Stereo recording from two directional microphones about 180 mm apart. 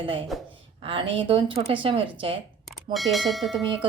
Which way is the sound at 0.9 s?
30° right (ahead or behind).